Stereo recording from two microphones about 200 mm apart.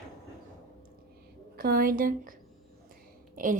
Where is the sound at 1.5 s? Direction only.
45° right (ahead or behind).